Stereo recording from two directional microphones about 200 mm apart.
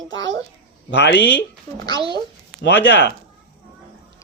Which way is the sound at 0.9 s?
60° left (ahead or behind).